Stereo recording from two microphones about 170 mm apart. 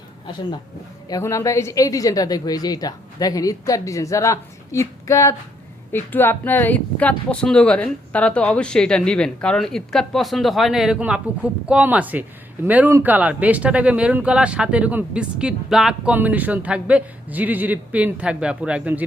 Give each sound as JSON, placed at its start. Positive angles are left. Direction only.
{"t": 1.0, "sound": "a woman's voice", "side_deg": 20}